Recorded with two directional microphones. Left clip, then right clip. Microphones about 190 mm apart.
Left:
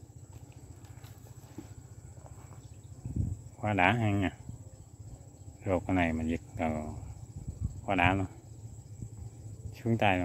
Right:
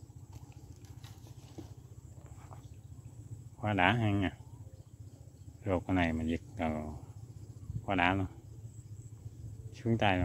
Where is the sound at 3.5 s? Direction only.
Centre (ahead or behind).